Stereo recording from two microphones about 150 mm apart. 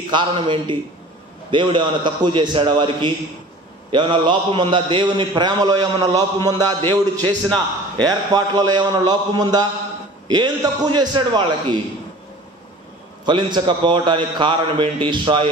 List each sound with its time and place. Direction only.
0.1 s a man's voice: 35° right (ahead or behind)
13.2 s a man's voice: 30° right (ahead or behind)